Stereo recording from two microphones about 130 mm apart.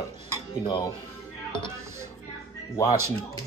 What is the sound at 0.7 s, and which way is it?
Speech, 30° left (ahead or behind).